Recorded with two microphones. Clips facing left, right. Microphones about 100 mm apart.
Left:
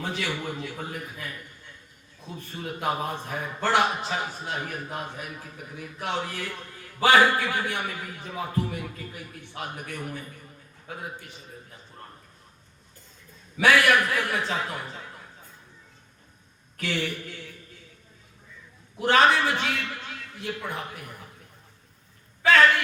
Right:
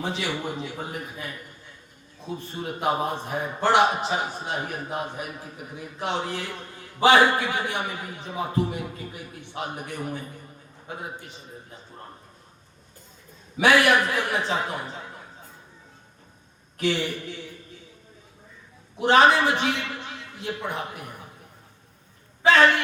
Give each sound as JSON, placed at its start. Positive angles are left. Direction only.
{"t": 0.0, "sound": "a man's voice", "side_deg": -20}
{"t": 2.5, "sound": "a man's voice", "side_deg": -25}
{"t": 13.6, "sound": "a man's voice", "side_deg": -20}
{"t": 16.7, "sound": "a man's voice", "side_deg": -20}
{"t": 18.9, "sound": "a man's voice", "side_deg": -20}
{"t": 22.4, "sound": "a man's voice", "side_deg": -25}